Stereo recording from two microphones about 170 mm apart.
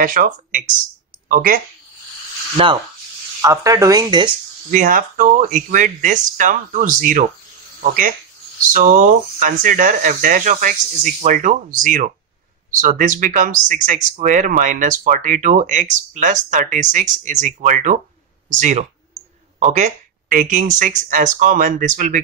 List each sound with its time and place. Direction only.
0.0 s speech: 50° right (ahead or behind)
2.5 s speech: 30° right (ahead or behind)
3.3 s speech: 20° right (ahead or behind)
4.6 s speech: 55° right (ahead or behind)
8.7 s speech: 50° right (ahead or behind)